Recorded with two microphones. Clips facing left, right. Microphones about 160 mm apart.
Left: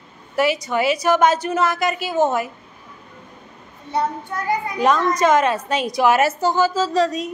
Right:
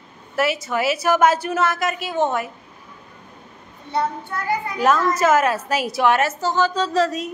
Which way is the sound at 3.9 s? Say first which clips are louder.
Left 1 dB; 15° left (ahead or behind).